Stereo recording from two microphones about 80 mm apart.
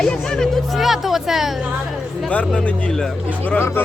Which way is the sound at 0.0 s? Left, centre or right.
Centre.